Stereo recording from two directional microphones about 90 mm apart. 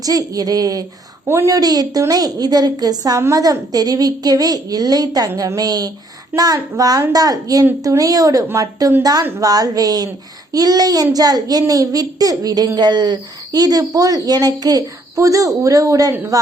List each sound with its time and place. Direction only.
0.0 s a woman's voice: 40° right (ahead or behind)
1.3 s a woman's voice: 30° right (ahead or behind)
1.5 s speech: 45° right (ahead or behind)
3.2 s a woman's voice: 30° right (ahead or behind)
3.4 s a woman's voice: 45° right (ahead or behind)